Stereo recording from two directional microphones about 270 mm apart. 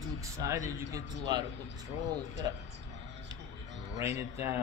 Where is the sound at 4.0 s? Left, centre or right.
Centre.